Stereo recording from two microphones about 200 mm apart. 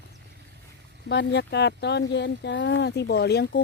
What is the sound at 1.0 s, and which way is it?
Speech, 60° left (ahead or behind).